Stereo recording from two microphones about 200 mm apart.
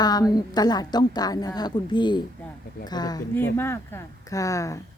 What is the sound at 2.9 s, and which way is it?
Speech, 20° left (ahead or behind).